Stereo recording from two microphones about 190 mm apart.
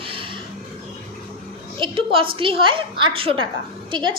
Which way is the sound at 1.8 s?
30° right (ahead or behind).